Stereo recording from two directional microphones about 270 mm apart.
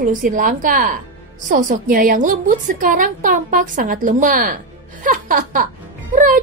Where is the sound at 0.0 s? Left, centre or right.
Right.